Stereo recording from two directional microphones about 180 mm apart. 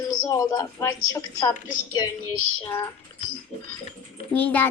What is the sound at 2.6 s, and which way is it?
Speech, 20° left (ahead or behind).